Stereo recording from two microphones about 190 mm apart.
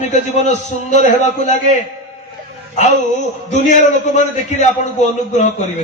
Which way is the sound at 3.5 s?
40° left (ahead or behind).